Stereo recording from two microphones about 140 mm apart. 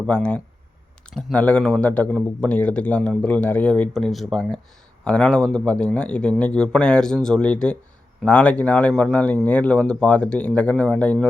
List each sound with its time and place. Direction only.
0.1 s speech: 5° left (ahead or behind)